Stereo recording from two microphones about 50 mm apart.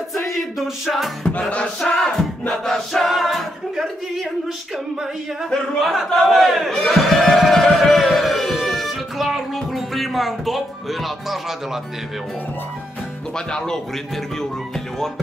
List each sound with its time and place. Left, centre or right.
0.1 s music: centre
1.8 s music: centre
2.1 s choir: centre
5.8 s speech: centre
6.8 s music: centre
13.5 s music: centre